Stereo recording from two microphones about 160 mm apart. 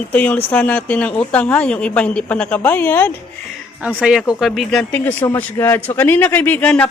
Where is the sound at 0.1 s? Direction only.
10° left (ahead or behind).